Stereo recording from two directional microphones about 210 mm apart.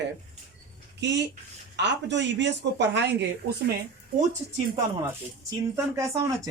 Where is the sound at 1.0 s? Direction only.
55° right (ahead or behind).